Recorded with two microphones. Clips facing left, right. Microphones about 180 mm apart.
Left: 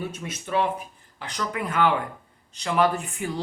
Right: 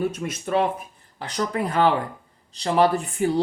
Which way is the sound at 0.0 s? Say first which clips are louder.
Right 7 dB; 45° right (ahead or behind).